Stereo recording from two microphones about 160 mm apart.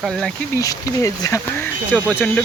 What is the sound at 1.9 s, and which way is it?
Speech, 10° left (ahead or behind).